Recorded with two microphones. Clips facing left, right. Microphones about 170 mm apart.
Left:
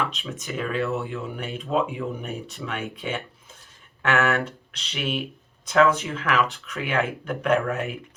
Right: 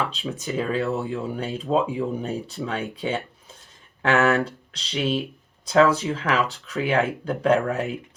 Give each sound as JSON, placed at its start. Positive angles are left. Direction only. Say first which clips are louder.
{"t": 0.0, "sound": "speech", "louder": "right 2 dB", "side_deg": -35}